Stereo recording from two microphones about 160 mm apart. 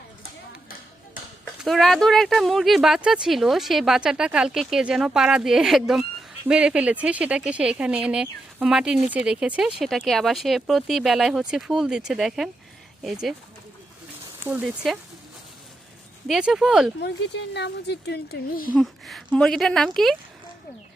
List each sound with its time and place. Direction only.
1.6 s speech: centre (ahead or behind)
14.4 s speech: 5° right (ahead or behind)
16.2 s speech: centre (ahead or behind)
17.0 s a woman's voice: 90° left; by 18.7 s 70° left (ahead or behind)
18.7 s speech: centre (ahead or behind)